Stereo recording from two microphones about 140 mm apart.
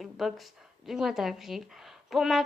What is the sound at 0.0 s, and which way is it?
A woman's voice, centre (ahead or behind).